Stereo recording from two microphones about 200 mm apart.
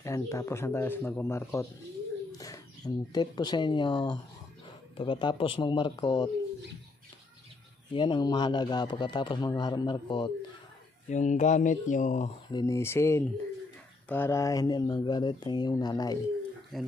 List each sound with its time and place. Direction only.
0.0 s a man's voice: 15° left (ahead or behind)
7.9 s a man's voice: 25° left (ahead or behind)
11.1 s speech: 35° left (ahead or behind)
12.4 s a man's voice: 20° left (ahead or behind)
16.7 s speech: centre (ahead or behind)